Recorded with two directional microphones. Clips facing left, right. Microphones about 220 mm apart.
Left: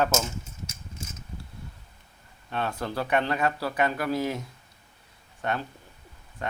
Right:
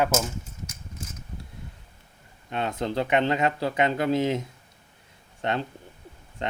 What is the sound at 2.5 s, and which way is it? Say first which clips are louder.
Speech: right 3 dB; 20° right (ahead or behind).